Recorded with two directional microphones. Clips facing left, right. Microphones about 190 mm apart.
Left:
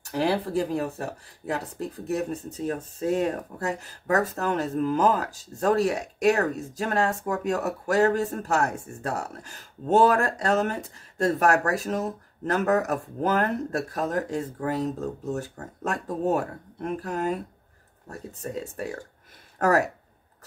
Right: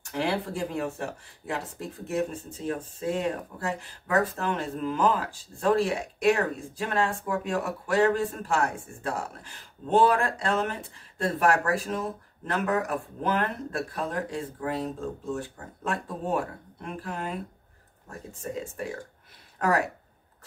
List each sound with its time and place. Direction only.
0.0 s speech: 35° left (ahead or behind)